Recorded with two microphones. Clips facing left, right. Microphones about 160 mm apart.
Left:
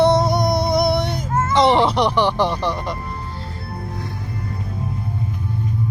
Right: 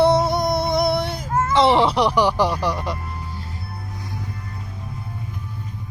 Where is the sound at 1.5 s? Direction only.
Centre (ahead or behind).